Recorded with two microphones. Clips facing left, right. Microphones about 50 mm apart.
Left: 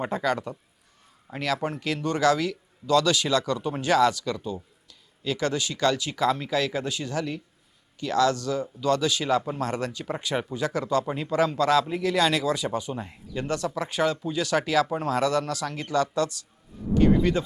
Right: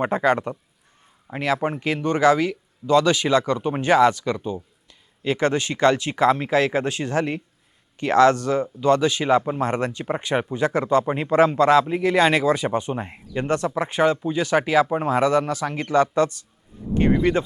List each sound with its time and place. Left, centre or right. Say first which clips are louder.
0.0 s speech: right 6 dB; right
1.3 s speech: right 5 dB; right